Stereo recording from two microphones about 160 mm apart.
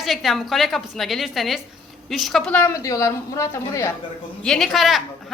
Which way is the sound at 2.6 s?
20° left (ahead or behind).